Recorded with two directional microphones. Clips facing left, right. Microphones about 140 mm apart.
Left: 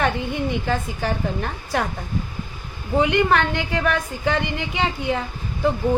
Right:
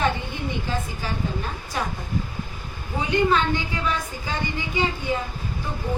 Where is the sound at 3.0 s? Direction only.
65° left (ahead or behind).